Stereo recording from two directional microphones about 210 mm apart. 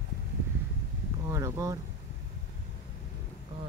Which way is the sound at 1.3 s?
15° right (ahead or behind).